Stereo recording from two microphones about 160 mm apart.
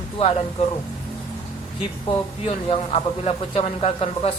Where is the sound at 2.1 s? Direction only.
35° left (ahead or behind).